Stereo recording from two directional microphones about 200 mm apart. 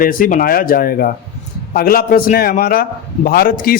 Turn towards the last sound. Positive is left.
turn(degrees=45)  # may be behind; listen again after turning